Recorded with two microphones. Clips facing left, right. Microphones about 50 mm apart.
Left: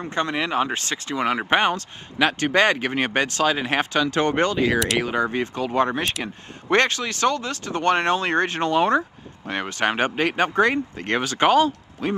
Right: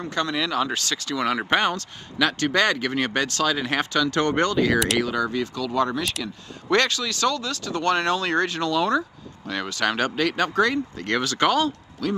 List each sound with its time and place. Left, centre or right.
0.0 s speech: left